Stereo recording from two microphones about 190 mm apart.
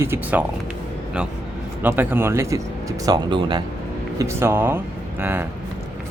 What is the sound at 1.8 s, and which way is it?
Speech, 10° right (ahead or behind).